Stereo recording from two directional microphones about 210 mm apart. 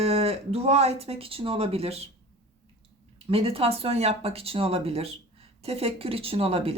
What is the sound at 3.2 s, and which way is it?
Speech, 25° right (ahead or behind).